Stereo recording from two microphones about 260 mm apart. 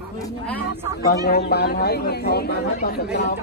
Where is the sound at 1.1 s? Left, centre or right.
Left.